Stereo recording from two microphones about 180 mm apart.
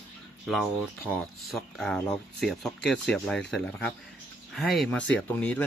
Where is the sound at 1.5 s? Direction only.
Centre (ahead or behind).